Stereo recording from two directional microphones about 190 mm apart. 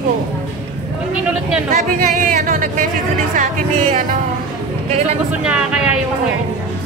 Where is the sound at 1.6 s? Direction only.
40° right (ahead or behind).